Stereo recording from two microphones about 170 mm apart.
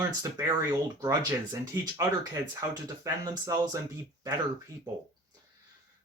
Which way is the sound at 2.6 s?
20° right (ahead or behind).